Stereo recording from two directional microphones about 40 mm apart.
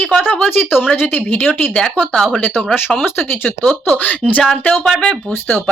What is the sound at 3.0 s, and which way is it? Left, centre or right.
Speech, left.